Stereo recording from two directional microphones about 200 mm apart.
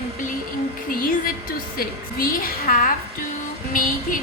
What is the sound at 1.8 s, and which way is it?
A woman's voice, 45° left (ahead or behind).